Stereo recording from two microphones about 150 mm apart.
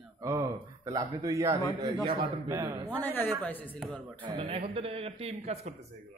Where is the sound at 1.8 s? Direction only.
35° right (ahead or behind).